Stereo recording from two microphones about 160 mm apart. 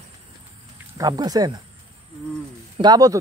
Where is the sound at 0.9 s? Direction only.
20° right (ahead or behind).